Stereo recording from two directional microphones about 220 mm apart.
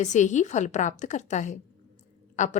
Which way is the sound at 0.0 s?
35° left (ahead or behind).